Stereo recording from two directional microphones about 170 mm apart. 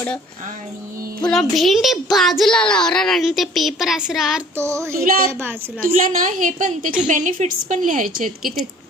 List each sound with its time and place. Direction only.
1.2 s speech: centre (ahead or behind)
4.5 s child singing: 15° right (ahead or behind)
5.8 s a woman's voice: 50° right (ahead or behind)